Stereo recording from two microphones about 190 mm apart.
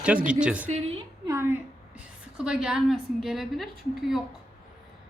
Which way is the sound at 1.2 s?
15° right (ahead or behind).